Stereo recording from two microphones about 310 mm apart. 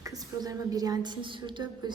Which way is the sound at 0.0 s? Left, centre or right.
Centre.